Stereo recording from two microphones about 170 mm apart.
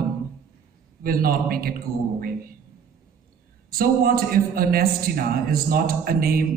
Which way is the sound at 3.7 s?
60° right (ahead or behind).